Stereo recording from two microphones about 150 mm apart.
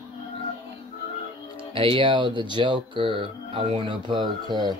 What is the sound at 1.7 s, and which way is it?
Speech, 35° right (ahead or behind).